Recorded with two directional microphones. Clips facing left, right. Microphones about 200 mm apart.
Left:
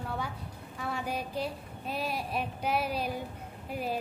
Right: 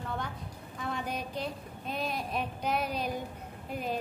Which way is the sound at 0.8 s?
5° left (ahead or behind).